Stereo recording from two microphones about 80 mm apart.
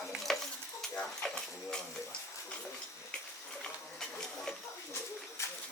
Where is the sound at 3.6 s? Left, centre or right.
Centre.